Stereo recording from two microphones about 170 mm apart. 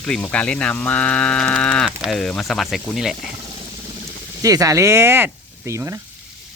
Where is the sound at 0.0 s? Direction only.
5° left (ahead or behind).